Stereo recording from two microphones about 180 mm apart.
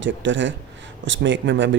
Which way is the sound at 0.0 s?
90° right.